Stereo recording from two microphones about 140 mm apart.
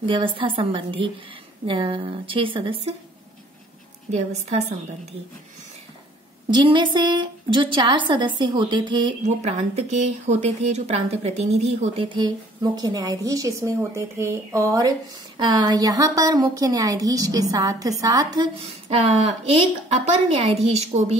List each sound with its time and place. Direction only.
0.0 s a woman's voice: 40° right (ahead or behind)
4.1 s speech: 55° right (ahead or behind)
6.5 s a woman's voice: 35° right (ahead or behind)
9.2 s speech: 55° right (ahead or behind)
12.1 s a woman's voice: 30° right (ahead or behind)
18.6 s speech: 45° right (ahead or behind)